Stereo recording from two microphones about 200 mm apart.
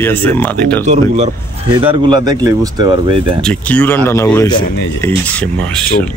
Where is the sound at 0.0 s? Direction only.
10° left (ahead or behind).